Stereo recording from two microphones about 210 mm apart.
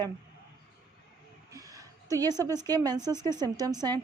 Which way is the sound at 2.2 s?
15° right (ahead or behind).